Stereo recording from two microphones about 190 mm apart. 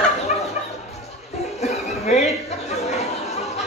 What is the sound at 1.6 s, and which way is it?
Chatter, 35° left (ahead or behind).